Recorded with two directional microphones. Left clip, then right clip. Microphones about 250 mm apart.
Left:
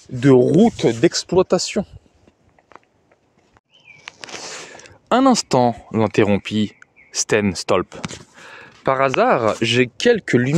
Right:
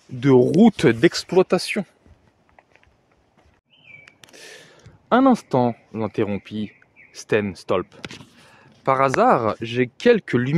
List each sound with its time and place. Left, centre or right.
0.2 s speech: centre
0.5 s speech: centre
1.0 s speech: centre
4.6 s speech: left
8.5 s a sound: centre
9.6 s speech: left
9.8 s speech: centre